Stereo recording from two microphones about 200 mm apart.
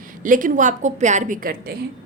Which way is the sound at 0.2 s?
40° right (ahead or behind).